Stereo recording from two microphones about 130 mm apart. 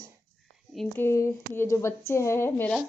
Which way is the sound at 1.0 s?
20° left (ahead or behind).